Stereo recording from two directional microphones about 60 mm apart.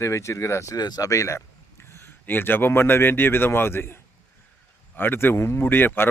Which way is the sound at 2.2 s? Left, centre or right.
Left.